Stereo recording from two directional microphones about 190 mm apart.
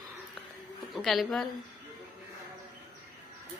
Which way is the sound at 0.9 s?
Centre (ahead or behind).